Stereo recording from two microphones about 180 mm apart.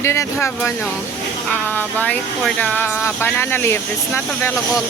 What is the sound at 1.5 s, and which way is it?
Speech, 10° left (ahead or behind).